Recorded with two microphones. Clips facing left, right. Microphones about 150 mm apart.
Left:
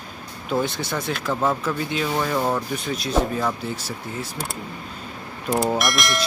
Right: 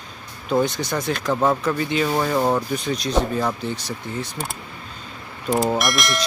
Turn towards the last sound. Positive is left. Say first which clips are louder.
# right 1 dB
turn(degrees=0)  # may be behind; listen again after turning